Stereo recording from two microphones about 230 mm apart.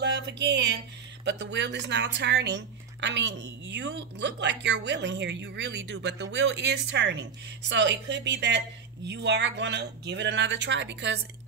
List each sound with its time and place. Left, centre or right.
0.0 s speech: right